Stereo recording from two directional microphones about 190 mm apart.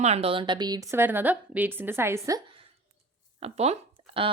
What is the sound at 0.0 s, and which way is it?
A woman's voice, 35° right (ahead or behind).